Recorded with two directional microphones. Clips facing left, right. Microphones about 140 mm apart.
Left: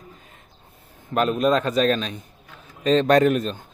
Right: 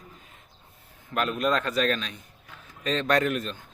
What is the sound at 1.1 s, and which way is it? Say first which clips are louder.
Speech: left 6 dB; 30° left (ahead or behind).